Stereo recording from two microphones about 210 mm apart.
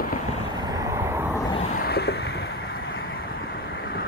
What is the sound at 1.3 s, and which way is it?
Vehicle, 15° left (ahead or behind).